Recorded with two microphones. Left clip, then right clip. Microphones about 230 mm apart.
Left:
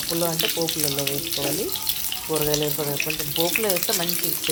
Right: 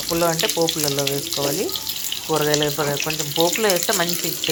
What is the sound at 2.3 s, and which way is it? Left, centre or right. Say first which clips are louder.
Frying: right 5 dB; right.